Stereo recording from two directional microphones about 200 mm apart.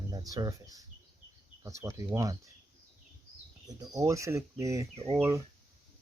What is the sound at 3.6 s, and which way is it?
Speech, 15° right (ahead or behind).